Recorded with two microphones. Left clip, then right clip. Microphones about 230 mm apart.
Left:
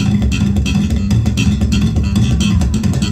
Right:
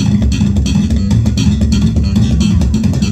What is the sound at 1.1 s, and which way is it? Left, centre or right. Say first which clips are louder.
Music: right 2 dB; left.